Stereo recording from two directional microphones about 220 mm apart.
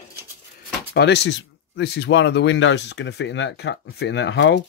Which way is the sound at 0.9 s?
50° left (ahead or behind).